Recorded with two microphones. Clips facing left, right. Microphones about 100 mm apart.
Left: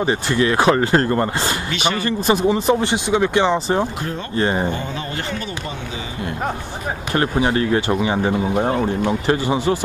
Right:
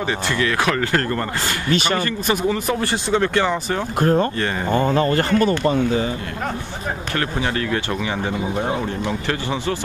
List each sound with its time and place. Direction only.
0.0 s speech: 25° left (ahead or behind)
1.7 s speech: 40° right (ahead or behind)
2.0 s speech: 30° left (ahead or behind)
4.0 s speech: 50° right (ahead or behind)
4.4 s speech: 25° left (ahead or behind)
4.7 s speech: 50° right (ahead or behind)
7.2 s speech: 25° left (ahead or behind)